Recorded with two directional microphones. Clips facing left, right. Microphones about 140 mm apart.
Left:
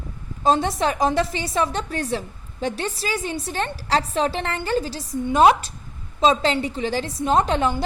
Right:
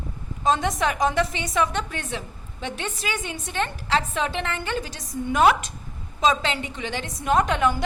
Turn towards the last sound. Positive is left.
turn(degrees=30)  # may be behind; listen again after turning